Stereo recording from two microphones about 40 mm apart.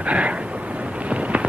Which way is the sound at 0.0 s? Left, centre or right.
Right.